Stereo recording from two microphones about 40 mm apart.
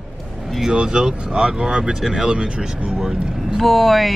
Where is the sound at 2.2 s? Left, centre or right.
Right.